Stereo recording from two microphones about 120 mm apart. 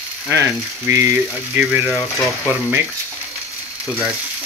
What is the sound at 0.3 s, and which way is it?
Speech, 25° right (ahead or behind).